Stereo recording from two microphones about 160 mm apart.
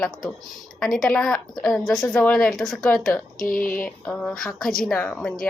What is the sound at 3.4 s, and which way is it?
Speech, 65° left (ahead or behind).